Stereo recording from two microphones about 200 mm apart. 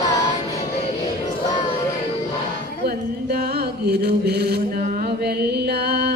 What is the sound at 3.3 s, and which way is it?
Music, 50° right (ahead or behind).